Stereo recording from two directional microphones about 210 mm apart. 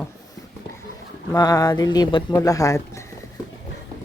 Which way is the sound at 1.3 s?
15° left (ahead or behind).